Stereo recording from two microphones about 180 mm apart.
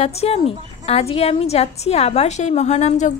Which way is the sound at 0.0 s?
35° left (ahead or behind).